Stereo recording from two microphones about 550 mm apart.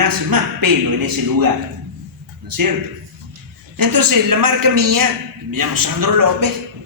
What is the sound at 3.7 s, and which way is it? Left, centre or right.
A man's voice, right.